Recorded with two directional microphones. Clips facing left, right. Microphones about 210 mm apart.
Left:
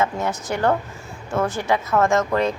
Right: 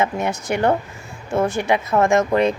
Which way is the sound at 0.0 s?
10° right (ahead or behind).